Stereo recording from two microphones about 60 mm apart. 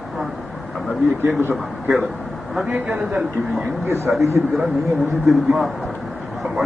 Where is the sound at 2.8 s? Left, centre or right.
Centre.